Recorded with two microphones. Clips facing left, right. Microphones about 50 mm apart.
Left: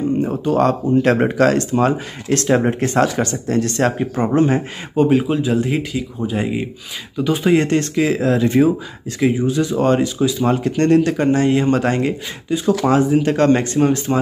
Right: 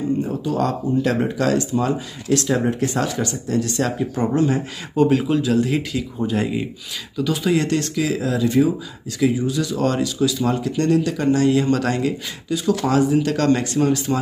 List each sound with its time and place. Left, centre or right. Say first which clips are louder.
0.2 s speech: left 5 dB; left
4.9 s speech: left 2 dB; centre
7.2 s speech: left 4 dB; left